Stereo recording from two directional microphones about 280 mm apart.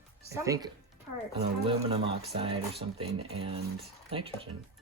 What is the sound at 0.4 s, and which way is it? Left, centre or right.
Speech, centre.